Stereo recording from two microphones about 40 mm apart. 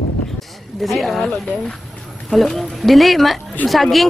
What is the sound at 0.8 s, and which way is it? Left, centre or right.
Speech, centre.